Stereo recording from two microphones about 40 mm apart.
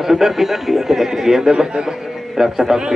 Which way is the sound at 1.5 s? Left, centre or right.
Right.